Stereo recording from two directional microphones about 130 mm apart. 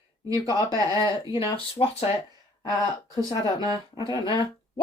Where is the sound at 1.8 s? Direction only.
45° left (ahead or behind).